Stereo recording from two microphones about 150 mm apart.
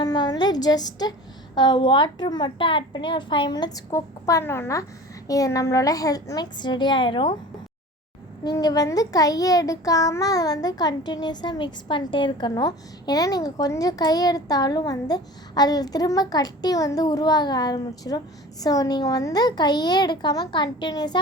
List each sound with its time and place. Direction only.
0.0 s a woman's voice: 25° left (ahead or behind)
3.9 s a child's voice: 20° left (ahead or behind)
8.4 s a child's voice: 25° left (ahead or behind)